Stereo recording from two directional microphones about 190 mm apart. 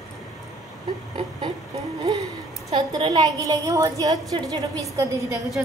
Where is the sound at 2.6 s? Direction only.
25° right (ahead or behind).